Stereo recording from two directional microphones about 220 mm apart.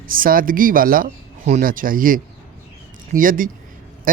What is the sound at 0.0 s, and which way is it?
Speech, 40° right (ahead or behind).